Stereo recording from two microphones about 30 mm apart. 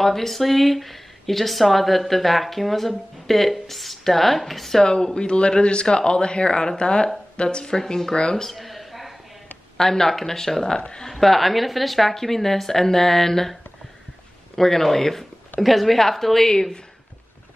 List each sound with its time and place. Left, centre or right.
0.0 s speech: centre
4.8 s speech: left
8.5 s a sound: centre
9.8 s speech: centre
11.1 s speech: centre
12.1 s speech: centre
15.6 s speech: centre